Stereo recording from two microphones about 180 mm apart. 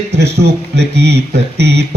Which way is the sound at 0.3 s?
65° right (ahead or behind).